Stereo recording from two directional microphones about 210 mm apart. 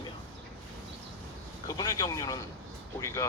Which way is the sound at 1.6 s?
20° left (ahead or behind).